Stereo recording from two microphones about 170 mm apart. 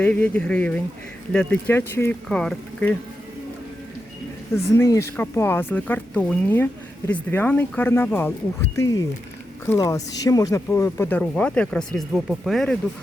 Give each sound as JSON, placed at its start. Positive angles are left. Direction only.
{"t": 0.0, "sound": "speech", "side_deg": 10}
{"t": 4.5, "sound": "speech", "side_deg": 15}